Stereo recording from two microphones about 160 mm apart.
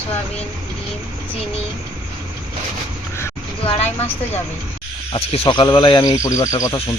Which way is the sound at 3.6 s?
40° left (ahead or behind).